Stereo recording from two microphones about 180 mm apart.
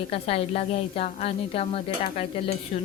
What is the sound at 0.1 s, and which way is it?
A woman's voice, 35° left (ahead or behind).